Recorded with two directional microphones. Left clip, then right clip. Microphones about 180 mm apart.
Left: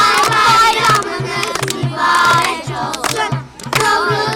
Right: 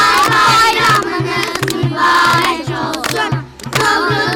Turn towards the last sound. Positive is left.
turn(degrees=15)  # may be behind; listen again after turning